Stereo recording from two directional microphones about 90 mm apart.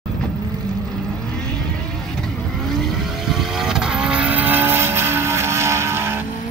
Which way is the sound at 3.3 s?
5° right (ahead or behind).